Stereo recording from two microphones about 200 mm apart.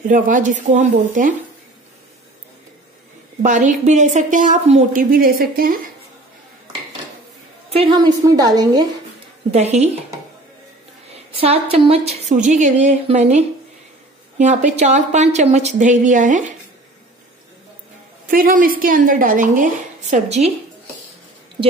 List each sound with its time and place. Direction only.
0.1 s a woman's voice: 40° right (ahead or behind)
3.4 s a woman's voice: 40° right (ahead or behind)
7.7 s a woman's voice: 25° right (ahead or behind)
9.5 s a woman's voice: 35° right (ahead or behind)
11.3 s a woman's voice: 30° right (ahead or behind)
14.4 s a woman's voice: 35° right (ahead or behind)
18.3 s a woman's voice: 45° right (ahead or behind)